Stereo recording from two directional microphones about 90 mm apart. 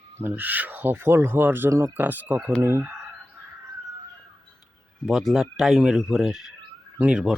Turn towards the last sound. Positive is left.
turn(degrees=-10)  # may be behind; listen again after turning